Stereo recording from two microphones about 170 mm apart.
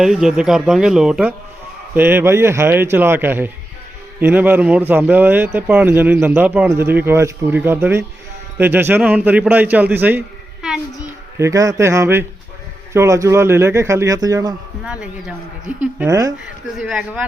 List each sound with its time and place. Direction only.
0.0 s a man's voice: 5° right (ahead or behind)
11.3 s speech: 20° right (ahead or behind)
14.8 s speech: 5° right (ahead or behind)